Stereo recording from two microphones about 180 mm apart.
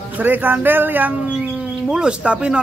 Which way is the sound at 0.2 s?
10° right (ahead or behind).